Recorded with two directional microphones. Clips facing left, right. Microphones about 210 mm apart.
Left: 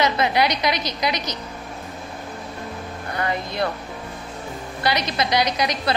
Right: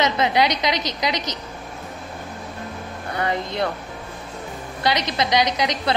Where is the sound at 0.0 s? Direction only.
20° right (ahead or behind).